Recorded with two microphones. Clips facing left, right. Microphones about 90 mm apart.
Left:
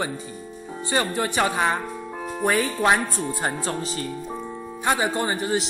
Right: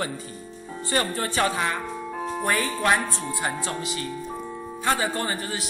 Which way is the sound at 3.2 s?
35° left (ahead or behind).